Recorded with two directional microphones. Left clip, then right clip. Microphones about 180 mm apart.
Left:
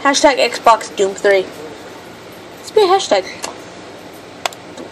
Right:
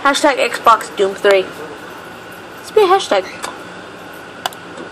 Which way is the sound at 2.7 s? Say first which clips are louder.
Even; 5° left (ahead or behind).